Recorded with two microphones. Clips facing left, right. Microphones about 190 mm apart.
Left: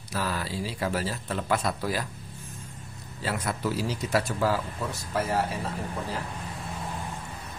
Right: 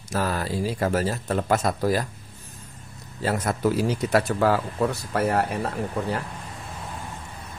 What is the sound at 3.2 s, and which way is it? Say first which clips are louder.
A man's voice: right 6 dB; 45° right (ahead or behind).